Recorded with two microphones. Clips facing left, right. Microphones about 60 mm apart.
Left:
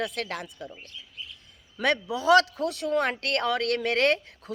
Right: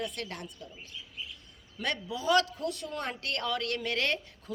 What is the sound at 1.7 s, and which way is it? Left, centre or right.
Speech, left.